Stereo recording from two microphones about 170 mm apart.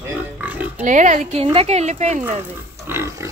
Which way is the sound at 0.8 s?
45° right (ahead or behind).